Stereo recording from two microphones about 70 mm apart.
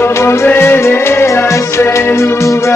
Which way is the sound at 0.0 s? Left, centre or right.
Left.